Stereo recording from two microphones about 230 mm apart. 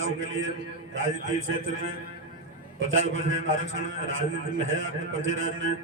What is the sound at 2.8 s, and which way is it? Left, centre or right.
A man's voice, right.